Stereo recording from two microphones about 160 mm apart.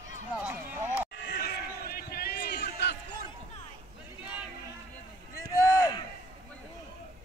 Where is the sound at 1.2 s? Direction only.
75° left (ahead or behind).